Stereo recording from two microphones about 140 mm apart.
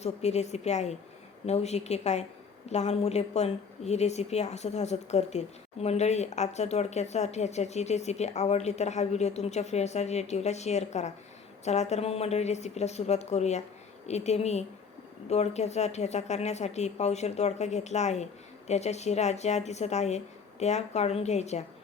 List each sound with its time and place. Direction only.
0.0 s a woman's voice: 50° left (ahead or behind)